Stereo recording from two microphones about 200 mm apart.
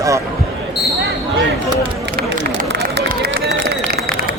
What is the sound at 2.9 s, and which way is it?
Run, 55° right (ahead or behind).